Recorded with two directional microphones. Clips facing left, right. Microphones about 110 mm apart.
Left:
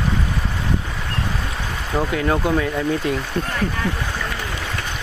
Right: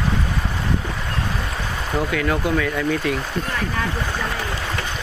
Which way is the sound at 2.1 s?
30° left (ahead or behind).